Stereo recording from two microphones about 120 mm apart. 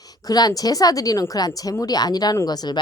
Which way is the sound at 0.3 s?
30° left (ahead or behind).